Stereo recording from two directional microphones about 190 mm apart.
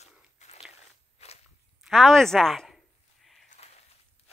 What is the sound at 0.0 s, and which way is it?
Crunch, 35° left (ahead or behind).